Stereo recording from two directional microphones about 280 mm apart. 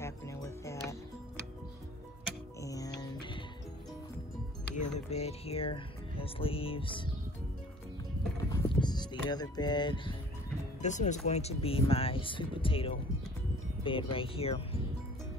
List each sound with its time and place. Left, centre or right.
0.0 s music: centre
2.6 s music: centre
4.7 s speech: left
8.5 s music: centre
10.8 s speech: left